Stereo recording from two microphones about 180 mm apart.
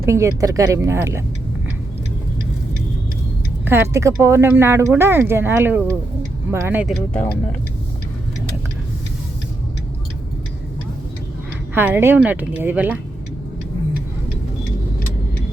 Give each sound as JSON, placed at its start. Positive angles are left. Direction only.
{"t": 0.0, "sound": "speech", "side_deg": -15}
{"t": 3.7, "sound": "speech", "side_deg": -15}
{"t": 6.8, "sound": "speech", "side_deg": 5}
{"t": 11.7, "sound": "speech", "side_deg": -10}